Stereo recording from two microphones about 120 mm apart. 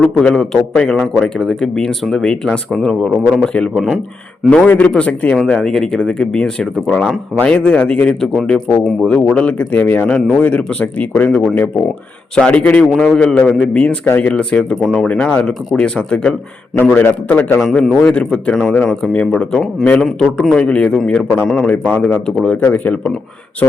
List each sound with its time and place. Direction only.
0.0 s a man's voice: 10° left (ahead or behind)
17.6 s speech: centre (ahead or behind)